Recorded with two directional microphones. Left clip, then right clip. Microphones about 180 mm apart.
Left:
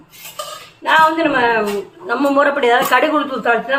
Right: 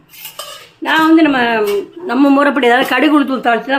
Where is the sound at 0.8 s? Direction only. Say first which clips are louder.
Right 2 dB; 65° right (ahead or behind).